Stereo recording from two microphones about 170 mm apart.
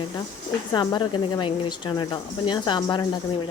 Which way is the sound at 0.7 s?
25° left (ahead or behind).